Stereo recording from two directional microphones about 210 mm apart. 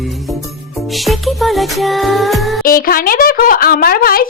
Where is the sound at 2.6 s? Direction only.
45° left (ahead or behind).